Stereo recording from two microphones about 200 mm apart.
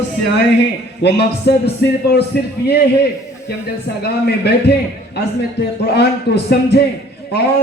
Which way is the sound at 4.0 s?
55° left (ahead or behind).